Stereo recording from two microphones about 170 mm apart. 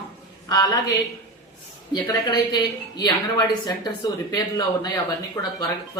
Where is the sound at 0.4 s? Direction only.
20° left (ahead or behind).